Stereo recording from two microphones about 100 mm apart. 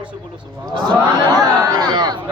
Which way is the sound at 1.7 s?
40° right (ahead or behind).